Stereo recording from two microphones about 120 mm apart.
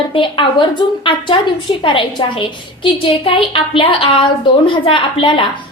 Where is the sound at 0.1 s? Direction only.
45° left (ahead or behind).